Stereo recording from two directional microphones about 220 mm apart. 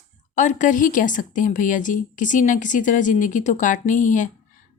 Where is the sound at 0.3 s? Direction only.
35° left (ahead or behind).